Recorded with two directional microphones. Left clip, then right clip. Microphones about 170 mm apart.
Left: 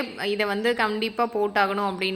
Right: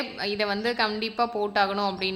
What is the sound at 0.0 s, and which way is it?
A woman's voice, 15° left (ahead or behind).